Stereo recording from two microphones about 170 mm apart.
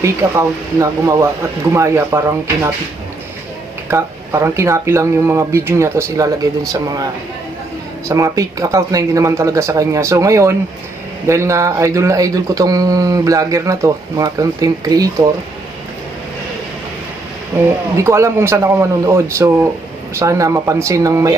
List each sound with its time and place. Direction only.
0.0 s speech: 20° right (ahead or behind)
3.8 s speech: 15° right (ahead or behind)
17.5 s speech: 15° right (ahead or behind)